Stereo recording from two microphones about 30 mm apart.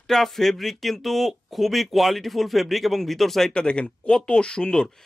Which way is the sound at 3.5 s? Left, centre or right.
Left.